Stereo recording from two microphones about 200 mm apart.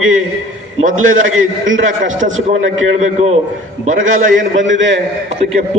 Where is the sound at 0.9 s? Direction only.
80° right.